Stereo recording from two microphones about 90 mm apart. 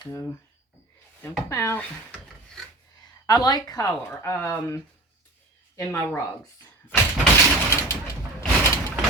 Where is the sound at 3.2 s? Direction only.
50° left (ahead or behind).